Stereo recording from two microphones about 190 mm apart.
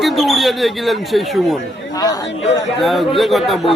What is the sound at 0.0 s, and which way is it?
Speech, centre (ahead or behind).